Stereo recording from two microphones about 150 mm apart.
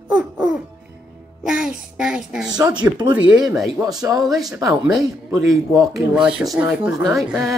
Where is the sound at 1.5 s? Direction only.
5° right (ahead or behind).